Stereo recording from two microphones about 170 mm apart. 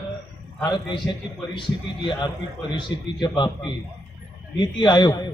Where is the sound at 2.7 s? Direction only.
25° left (ahead or behind).